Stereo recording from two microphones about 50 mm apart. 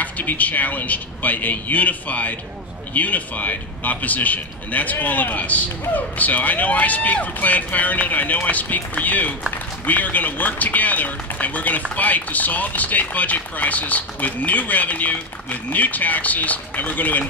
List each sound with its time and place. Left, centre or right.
0.0 s a man's voice: left